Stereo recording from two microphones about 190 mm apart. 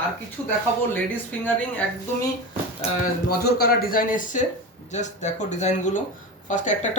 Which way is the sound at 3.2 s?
55° left (ahead or behind).